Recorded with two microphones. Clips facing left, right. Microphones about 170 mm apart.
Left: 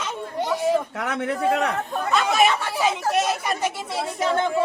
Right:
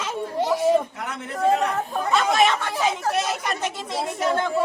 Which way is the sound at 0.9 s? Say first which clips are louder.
Left 6 dB; 70° left (ahead or behind).